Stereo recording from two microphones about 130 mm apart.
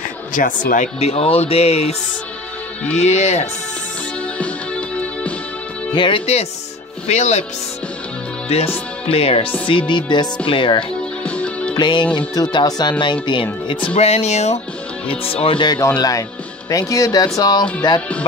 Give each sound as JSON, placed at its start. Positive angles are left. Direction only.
{"t": 0.3, "sound": "speech", "side_deg": 90}
{"t": 0.9, "sound": "speech", "side_deg": 55}
{"t": 4.4, "sound": "music", "side_deg": 10}
{"t": 5.9, "sound": "speech", "side_deg": 40}
{"t": 8.5, "sound": "speech", "side_deg": 50}
{"t": 11.2, "sound": "music", "side_deg": 10}
{"t": 11.7, "sound": "music", "side_deg": 35}
{"t": 12.2, "sound": "speech", "side_deg": 30}
{"t": 13.9, "sound": "speech", "side_deg": 55}
{"t": 15.0, "sound": "speech", "side_deg": 45}
{"t": 16.0, "sound": "speech", "side_deg": 25}